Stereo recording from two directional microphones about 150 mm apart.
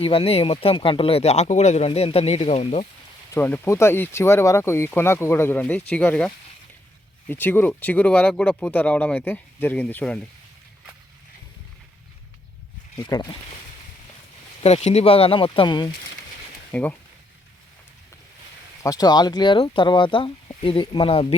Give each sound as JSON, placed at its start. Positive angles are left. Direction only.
{"t": 0.0, "sound": "speech", "side_deg": 40}
{"t": 3.3, "sound": "speech", "side_deg": 15}
{"t": 13.0, "sound": "speech", "side_deg": 25}
{"t": 14.6, "sound": "speech", "side_deg": 45}
{"t": 16.7, "sound": "speech", "side_deg": 10}
{"t": 18.8, "sound": "speech", "side_deg": 25}